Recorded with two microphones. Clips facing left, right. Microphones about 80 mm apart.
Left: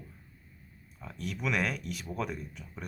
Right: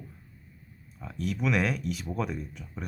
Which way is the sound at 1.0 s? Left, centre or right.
Centre.